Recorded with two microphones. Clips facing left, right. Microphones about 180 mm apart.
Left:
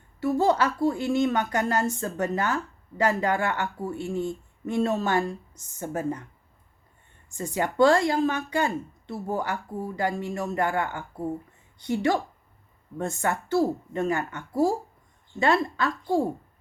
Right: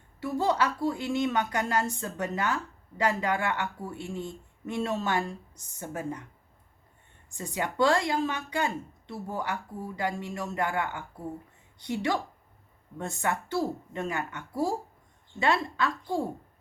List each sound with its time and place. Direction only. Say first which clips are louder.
0.2 s speech: left 5 dB; 50° left (ahead or behind)
7.3 s speech: left 5 dB; 45° left (ahead or behind)